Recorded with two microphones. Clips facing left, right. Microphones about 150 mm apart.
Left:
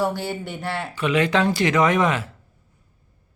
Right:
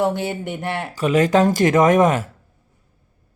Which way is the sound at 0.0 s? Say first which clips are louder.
Right 3 dB; 20° right (ahead or behind).